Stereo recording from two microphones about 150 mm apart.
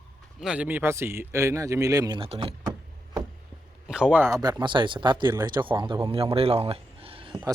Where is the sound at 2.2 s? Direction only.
40° right (ahead or behind).